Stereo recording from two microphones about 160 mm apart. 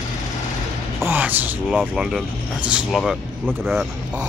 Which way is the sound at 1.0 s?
10° right (ahead or behind).